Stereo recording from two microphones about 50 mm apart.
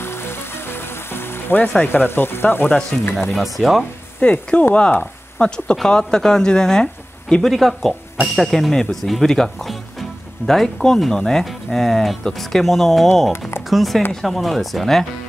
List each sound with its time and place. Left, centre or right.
0.0 s music: left
1.9 s speech: left
3.2 s speech: centre
4.2 s speech: left
5.8 s speech: centre
7.4 s speech: centre